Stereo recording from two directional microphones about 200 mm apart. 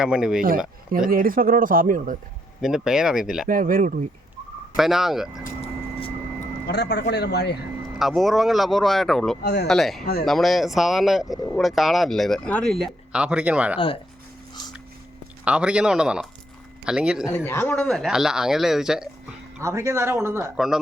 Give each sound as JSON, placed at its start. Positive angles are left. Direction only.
{"t": 0.0, "sound": "speech", "side_deg": -5}
{"t": 1.1, "sound": "speech", "side_deg": -45}
{"t": 2.6, "sound": "speech", "side_deg": 0}
{"t": 3.5, "sound": "speech", "side_deg": -45}
{"t": 4.8, "sound": "speech", "side_deg": 0}
{"t": 6.7, "sound": "speech", "side_deg": 55}
{"t": 7.9, "sound": "speech", "side_deg": 0}
{"t": 9.4, "sound": "speech", "side_deg": 55}
{"t": 9.6, "sound": "speech", "side_deg": 0}
{"t": 13.7, "sound": "speech", "side_deg": 25}
{"t": 15.4, "sound": "speech", "side_deg": -5}
{"t": 17.2, "sound": "speech", "side_deg": 10}
{"t": 19.5, "sound": "speech", "side_deg": -15}